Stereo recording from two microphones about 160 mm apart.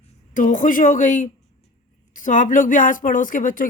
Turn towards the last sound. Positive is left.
turn(degrees=55)  # may be behind; listen again after turning